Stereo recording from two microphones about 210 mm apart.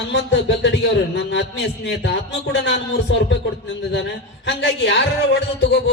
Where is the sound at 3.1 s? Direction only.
60° left (ahead or behind).